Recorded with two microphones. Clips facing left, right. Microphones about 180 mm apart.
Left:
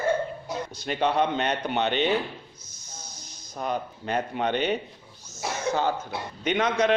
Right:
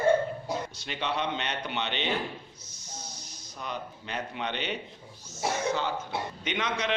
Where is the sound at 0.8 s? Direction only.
45° left (ahead or behind).